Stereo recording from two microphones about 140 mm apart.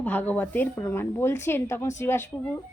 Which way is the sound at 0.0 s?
10° left (ahead or behind).